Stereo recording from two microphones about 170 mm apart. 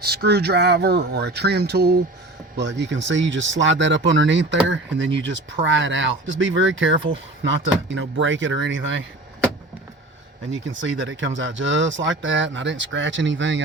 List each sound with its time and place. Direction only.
0.0 s speech: 65° right (ahead or behind)
2.6 s speech: 90° right
10.5 s speech: 90° right